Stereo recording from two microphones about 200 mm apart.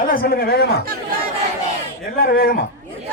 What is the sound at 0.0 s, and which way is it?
Speech, 45° left (ahead or behind).